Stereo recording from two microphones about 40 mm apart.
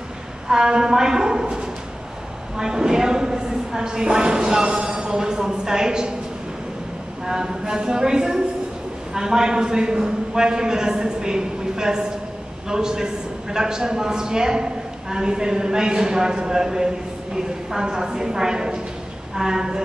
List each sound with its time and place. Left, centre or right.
0.5 s a man's voice: centre
7.2 s a man's voice: centre